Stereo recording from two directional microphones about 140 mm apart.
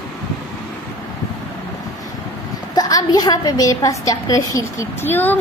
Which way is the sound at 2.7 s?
25° left (ahead or behind).